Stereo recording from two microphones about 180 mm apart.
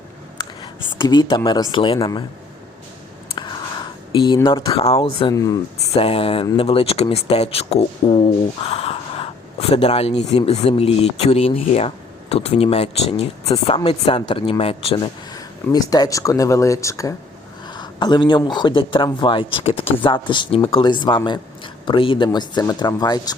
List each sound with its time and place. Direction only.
0.3 s a sound: 25° left (ahead or behind)
1.7 s speech: 25° left (ahead or behind)
3.2 s a sound: 25° left (ahead or behind)
4.4 s speech: 30° left (ahead or behind)
5.3 s speech: 15° left (ahead or behind)
5.9 s speech: 35° left (ahead or behind)